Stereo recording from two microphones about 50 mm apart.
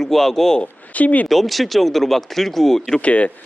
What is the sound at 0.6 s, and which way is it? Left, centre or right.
Speech, left.